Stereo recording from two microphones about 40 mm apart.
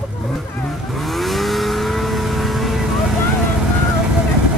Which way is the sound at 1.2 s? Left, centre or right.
Centre.